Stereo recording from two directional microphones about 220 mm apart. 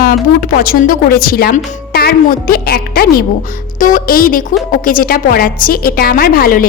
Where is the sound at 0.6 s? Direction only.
40° left (ahead or behind).